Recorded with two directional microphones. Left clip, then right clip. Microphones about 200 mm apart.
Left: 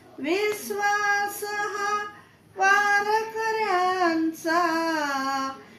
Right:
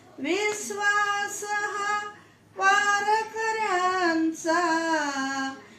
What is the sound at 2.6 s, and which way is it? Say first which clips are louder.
Child singing: left 2 dB; centre (ahead or behind).